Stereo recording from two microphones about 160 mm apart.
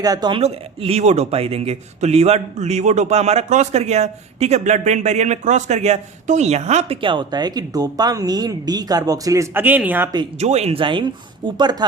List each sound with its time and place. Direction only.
0.0 s a woman's voice: 25° right (ahead or behind)
0.4 s speech: 40° right (ahead or behind); by 10.1 s 10° right (ahead or behind)
10.4 s a woman's voice: 45° right (ahead or behind); by 11.9 s 25° right (ahead or behind)